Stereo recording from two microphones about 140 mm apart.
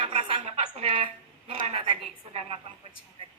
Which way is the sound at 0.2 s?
40° right (ahead or behind).